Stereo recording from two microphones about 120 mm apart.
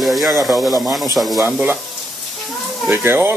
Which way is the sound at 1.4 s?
15° right (ahead or behind).